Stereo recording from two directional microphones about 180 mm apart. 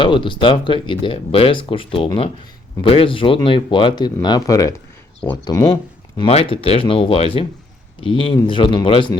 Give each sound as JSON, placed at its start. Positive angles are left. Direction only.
{"t": 0.0, "sound": "speech", "side_deg": 25}